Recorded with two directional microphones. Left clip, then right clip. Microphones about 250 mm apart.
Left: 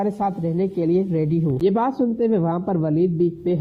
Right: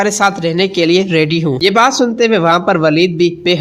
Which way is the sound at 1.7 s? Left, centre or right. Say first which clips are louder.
Right 11 dB; centre.